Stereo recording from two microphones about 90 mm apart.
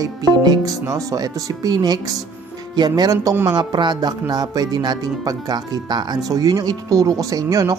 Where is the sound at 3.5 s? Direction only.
50° right (ahead or behind).